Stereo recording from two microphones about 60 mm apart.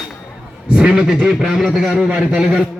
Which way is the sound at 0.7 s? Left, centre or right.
Centre.